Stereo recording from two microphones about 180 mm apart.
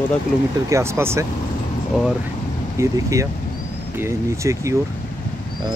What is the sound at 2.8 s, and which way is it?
Speech, 15° right (ahead or behind).